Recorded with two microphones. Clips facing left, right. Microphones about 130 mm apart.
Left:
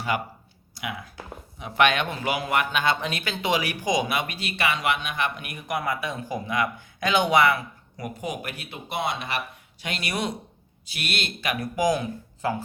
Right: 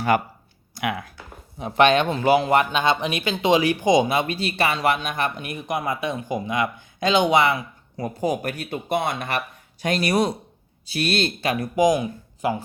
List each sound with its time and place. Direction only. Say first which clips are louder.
0.1 s speech: right 6 dB; 45° right (ahead or behind)
0.8 s speech: right 7 dB; 60° right (ahead or behind)
1.5 s a man's voice: right 5 dB; 35° right (ahead or behind)
2.6 s speech: right 4 dB; 20° right (ahead or behind); by 5.5 s 40° right (ahead or behind)
5.5 s a man's voice: right 2 dB; 25° right (ahead or behind)